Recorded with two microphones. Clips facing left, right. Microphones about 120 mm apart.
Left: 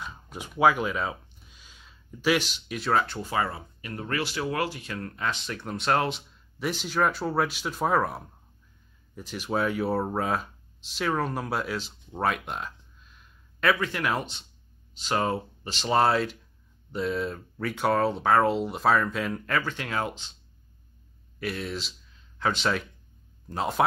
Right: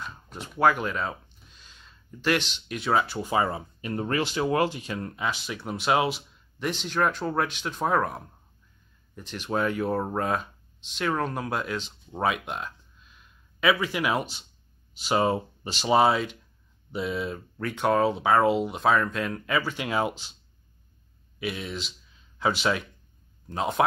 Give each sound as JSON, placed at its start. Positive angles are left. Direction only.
{"t": 0.0, "sound": "speech", "side_deg": 10}
{"t": 3.3, "sound": "speech", "side_deg": -20}
{"t": 6.7, "sound": "speech", "side_deg": 5}
{"t": 21.4, "sound": "speech", "side_deg": 0}